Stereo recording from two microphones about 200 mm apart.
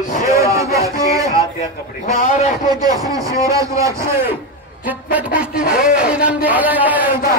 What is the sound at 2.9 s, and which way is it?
Speech, 15° right (ahead or behind).